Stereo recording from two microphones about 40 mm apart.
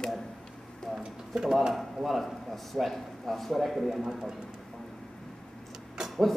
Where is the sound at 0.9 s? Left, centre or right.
Centre.